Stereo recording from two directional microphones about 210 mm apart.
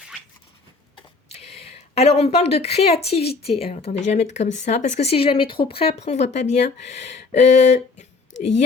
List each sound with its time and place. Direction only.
1.3 s a woman's voice: 30° left (ahead or behind)